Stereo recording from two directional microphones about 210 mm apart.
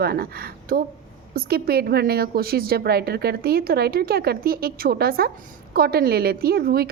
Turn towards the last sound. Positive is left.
turn(degrees=-45)  # may be behind; listen again after turning